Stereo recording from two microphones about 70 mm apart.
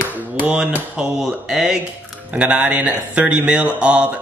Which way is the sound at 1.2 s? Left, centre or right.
Centre.